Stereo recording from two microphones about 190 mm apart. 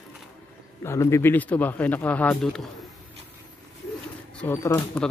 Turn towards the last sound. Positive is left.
turn(degrees=15)  # may be behind; listen again after turning